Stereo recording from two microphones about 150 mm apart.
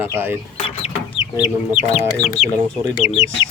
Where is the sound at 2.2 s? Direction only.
45° left (ahead or behind).